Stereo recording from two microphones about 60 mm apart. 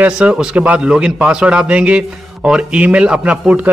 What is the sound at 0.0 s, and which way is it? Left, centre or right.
A man's voice, centre.